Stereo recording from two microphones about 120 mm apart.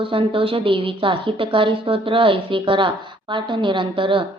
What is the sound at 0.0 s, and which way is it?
A woman's voice, 45° right (ahead or behind).